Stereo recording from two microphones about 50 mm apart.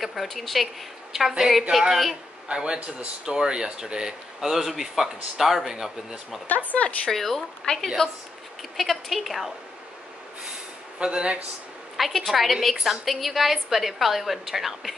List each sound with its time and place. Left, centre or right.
0.0 s a woman's voice: centre
2.4 s speech: centre
6.4 s speech: left
7.1 s a woman's voice: centre
8.7 s a woman's voice: centre
11.0 s speech: centre
12.3 s a woman's voice: centre